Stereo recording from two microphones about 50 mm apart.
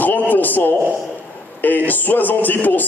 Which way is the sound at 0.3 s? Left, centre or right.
Left.